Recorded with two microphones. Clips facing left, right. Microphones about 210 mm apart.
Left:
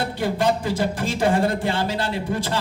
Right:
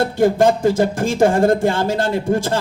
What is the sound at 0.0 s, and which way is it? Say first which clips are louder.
A man's voice: right 8 dB; 45° right (ahead or behind).